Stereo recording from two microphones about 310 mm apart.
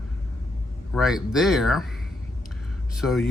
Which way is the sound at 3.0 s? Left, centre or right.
Centre.